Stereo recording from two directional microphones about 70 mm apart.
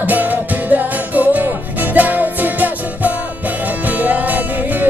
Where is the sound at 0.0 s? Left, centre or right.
Right.